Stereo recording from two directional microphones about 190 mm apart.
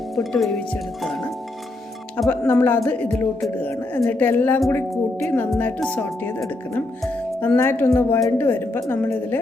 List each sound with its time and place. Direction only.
0.2 s speech: centre (ahead or behind)
2.2 s speech: 5° left (ahead or behind)